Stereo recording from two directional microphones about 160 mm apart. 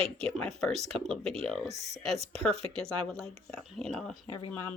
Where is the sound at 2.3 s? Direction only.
5° left (ahead or behind).